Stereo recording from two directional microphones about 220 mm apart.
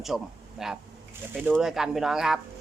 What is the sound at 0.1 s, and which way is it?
A man's voice, centre (ahead or behind).